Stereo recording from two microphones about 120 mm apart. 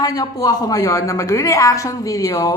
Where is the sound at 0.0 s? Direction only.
30° left (ahead or behind).